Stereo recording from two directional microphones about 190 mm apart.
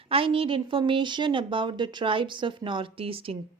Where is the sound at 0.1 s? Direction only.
30° right (ahead or behind).